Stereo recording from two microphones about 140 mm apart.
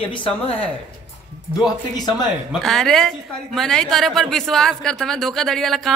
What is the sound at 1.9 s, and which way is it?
Speech, 30° left (ahead or behind).